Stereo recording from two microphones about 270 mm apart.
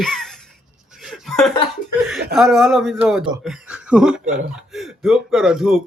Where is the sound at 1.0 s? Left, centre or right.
Centre.